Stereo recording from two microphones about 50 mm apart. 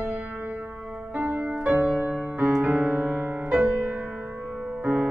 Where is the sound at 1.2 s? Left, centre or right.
Right.